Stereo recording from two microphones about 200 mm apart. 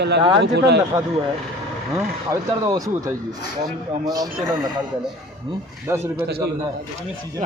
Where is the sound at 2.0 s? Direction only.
15° right (ahead or behind).